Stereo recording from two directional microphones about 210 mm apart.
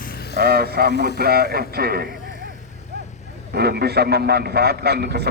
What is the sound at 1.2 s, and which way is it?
Speech, 45° right (ahead or behind).